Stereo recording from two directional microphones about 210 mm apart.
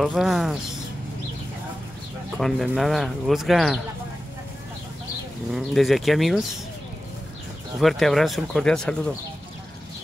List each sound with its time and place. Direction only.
0.0 s speech: centre (ahead or behind)
2.3 s speech: centre (ahead or behind)
5.5 s speech: centre (ahead or behind)
7.8 s speech: centre (ahead or behind)